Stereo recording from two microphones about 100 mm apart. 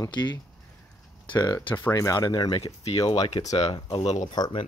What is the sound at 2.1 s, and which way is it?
Speech, 45° left (ahead or behind).